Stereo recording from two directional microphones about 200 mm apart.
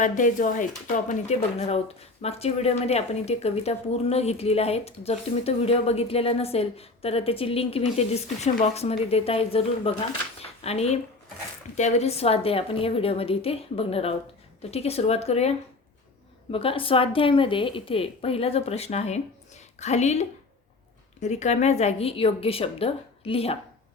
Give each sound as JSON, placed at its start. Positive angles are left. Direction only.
{"t": 0.0, "sound": "a woman's voice", "side_deg": 40}